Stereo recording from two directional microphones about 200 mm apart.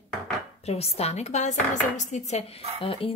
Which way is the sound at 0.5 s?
30° left (ahead or behind).